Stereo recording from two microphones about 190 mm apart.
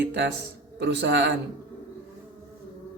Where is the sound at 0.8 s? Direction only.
65° right (ahead or behind).